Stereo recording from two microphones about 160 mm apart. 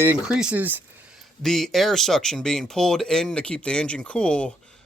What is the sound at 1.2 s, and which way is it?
Speech, centre (ahead or behind).